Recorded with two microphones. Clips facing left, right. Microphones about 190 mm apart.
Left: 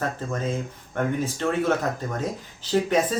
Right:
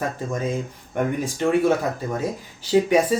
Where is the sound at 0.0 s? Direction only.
10° right (ahead or behind).